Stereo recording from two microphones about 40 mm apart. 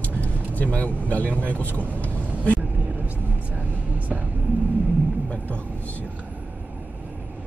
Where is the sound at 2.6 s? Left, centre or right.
Right.